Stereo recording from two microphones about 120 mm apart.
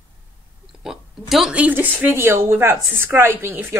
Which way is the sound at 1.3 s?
5° right (ahead or behind).